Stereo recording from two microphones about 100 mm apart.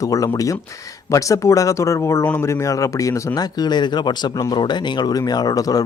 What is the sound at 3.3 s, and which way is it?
Speech, 45° left (ahead or behind).